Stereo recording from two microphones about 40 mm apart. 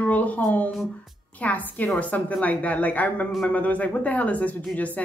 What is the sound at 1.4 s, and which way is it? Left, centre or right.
Speech, left.